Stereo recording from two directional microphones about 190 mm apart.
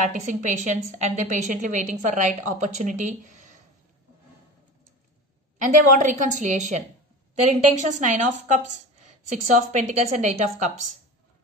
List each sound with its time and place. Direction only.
0.0 s a woman's voice: 40° right (ahead or behind)
5.6 s a woman's voice: 40° right (ahead or behind)